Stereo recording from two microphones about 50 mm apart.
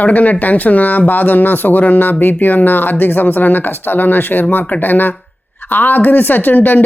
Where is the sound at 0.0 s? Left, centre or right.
Left.